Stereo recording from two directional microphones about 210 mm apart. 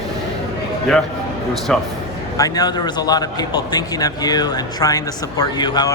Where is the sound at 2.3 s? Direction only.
15° left (ahead or behind).